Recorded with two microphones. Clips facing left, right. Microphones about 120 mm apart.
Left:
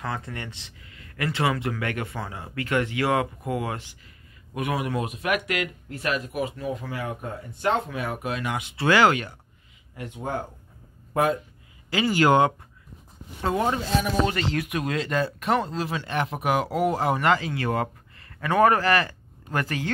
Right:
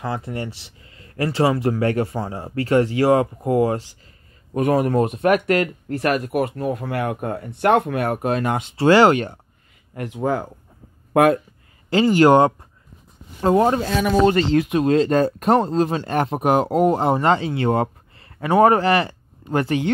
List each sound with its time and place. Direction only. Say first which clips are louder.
0.0 s speech: right 6 dB; 25° right (ahead or behind); by 5.9 s 40° right (ahead or behind)
5.9 s speech: right 7 dB; 55° right (ahead or behind); by 9.4 s 35° right (ahead or behind)
9.9 s speech: right 8 dB; 85° right
11.1 s speech: right 8 dB; 65° right (ahead or behind)
11.9 s speech: right 7 dB; 35° right (ahead or behind)
14.2 s speech: right 10 dB; 35° right (ahead or behind)